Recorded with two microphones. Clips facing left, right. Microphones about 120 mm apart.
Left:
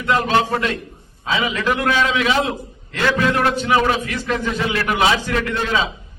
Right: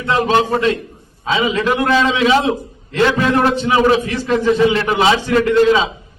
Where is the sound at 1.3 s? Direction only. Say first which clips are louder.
Right 4 dB; 25° right (ahead or behind).